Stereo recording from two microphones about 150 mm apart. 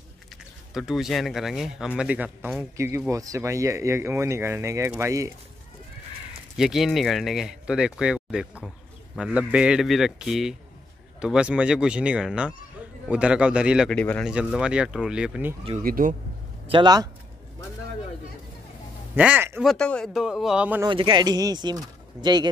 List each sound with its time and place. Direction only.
0.7 s speech: centre (ahead or behind)
2.8 s speech: 20° right (ahead or behind)
6.5 s speech: centre (ahead or behind)
13.8 s a man's voice: 10° left (ahead or behind)
14.2 s speech: 5° right (ahead or behind)
15.8 s speech: 70° right (ahead or behind)
16.6 s speech: 30° right (ahead or behind)
19.1 s speech: 10° right (ahead or behind)
19.6 s speech: 5° left (ahead or behind)
20.8 s speech: 30° right (ahead or behind)